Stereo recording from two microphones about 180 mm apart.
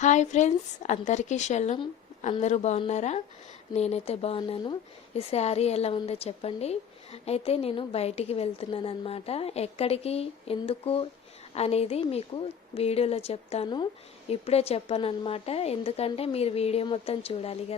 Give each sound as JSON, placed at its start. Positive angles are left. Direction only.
{"t": 0.0, "sound": "speech", "side_deg": 40}